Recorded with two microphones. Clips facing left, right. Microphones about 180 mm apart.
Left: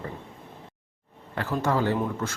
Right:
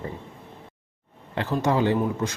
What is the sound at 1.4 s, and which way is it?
Speech, 20° right (ahead or behind).